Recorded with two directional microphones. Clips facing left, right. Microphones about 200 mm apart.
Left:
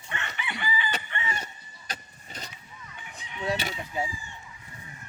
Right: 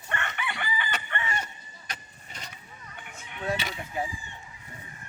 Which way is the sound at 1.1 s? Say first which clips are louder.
Right 2 dB; 55° right (ahead or behind).